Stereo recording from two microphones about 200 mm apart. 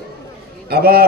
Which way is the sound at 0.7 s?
50° right (ahead or behind).